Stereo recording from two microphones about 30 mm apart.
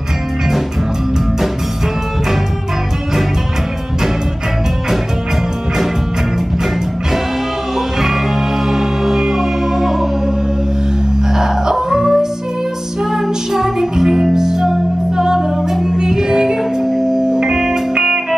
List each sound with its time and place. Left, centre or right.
8.6 s music: centre
11.3 s music: centre
15.7 s music: centre
17.9 s music: right